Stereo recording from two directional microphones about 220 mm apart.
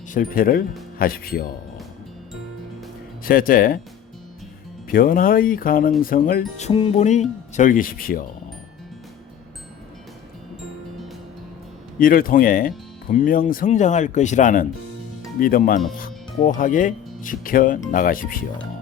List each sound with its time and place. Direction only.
0.1 s speech: 40° left (ahead or behind)
3.2 s speech: 40° left (ahead or behind)
4.9 s speech: 40° left (ahead or behind)
6.6 s speech: 25° left (ahead or behind)
11.9 s speech: 40° left (ahead or behind)